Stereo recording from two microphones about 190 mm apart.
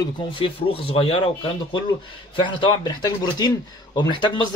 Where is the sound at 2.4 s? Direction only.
25° left (ahead or behind).